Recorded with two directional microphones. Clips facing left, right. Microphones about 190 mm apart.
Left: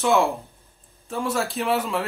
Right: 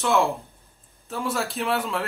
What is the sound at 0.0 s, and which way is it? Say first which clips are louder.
Speech: left 2 dB; centre (ahead or behind).